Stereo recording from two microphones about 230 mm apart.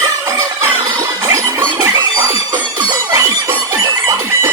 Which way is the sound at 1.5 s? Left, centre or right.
Centre.